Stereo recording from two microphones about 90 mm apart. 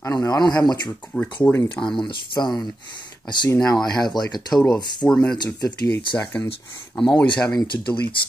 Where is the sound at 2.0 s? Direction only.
55° left (ahead or behind).